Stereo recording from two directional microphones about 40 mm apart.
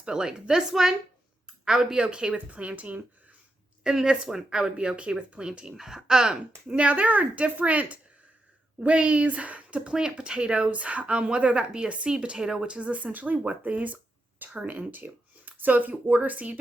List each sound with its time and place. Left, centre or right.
0.0 s speech: centre; by 3.0 s right
3.8 s speech: centre
6.7 s speech: right
10.7 s speech: right
12.4 s speech: centre
12.6 s speech: right
13.7 s a sound: right
14.5 s speech: right